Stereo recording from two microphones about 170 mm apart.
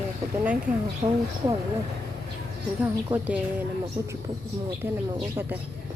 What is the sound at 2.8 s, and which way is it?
Speech, 10° right (ahead or behind).